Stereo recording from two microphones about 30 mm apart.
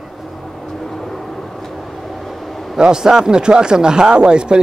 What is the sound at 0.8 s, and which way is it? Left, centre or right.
Vehicle, centre.